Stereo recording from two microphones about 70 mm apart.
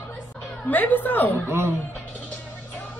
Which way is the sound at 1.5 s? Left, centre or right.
Right.